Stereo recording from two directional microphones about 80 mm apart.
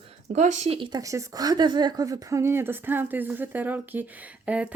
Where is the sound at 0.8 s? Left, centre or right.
Right.